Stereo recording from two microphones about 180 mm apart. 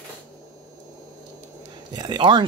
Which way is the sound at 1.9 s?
25° right (ahead or behind).